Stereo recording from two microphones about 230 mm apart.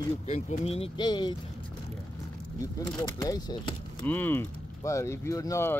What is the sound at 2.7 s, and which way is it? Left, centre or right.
Speech, centre.